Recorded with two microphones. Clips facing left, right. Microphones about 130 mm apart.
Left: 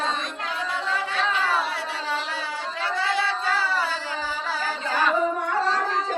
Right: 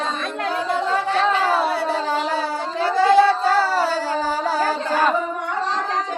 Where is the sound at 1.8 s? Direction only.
40° right (ahead or behind).